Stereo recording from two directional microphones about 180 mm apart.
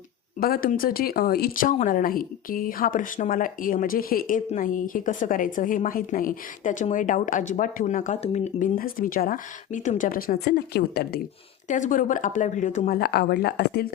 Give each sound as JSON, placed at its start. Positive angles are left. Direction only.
{"t": 0.3, "sound": "speech", "side_deg": 55}
{"t": 11.7, "sound": "speech", "side_deg": 45}
{"t": 13.0, "sound": "speech", "side_deg": 60}